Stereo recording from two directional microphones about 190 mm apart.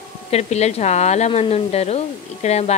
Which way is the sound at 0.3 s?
35° left (ahead or behind).